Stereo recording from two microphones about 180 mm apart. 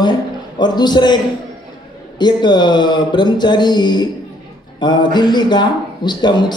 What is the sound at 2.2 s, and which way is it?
A man's voice, 25° left (ahead or behind).